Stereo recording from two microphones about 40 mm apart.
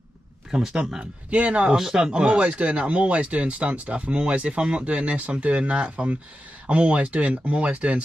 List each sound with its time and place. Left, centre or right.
0.6 s speech: centre
1.3 s speech: right
1.8 s speech: centre
2.2 s speech: right